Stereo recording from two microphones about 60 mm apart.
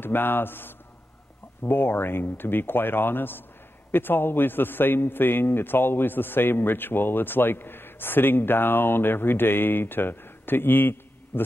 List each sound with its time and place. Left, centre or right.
0.0 s a man's voice: left